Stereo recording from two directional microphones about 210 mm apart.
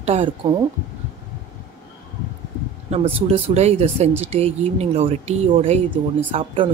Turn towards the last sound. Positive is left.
turn(degrees=-25)  # may be behind; listen again after turning